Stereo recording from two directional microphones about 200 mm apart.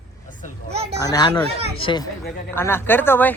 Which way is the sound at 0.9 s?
20° left (ahead or behind).